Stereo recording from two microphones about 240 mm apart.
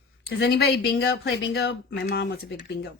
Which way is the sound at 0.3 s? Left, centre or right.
Left.